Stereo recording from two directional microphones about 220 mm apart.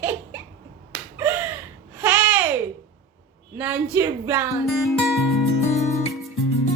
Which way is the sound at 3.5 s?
10° right (ahead or behind).